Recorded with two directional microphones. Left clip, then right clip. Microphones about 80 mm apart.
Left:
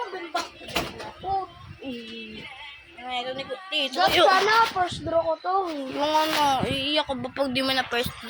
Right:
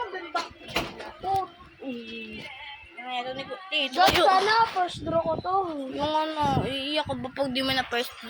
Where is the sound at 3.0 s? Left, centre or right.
Left.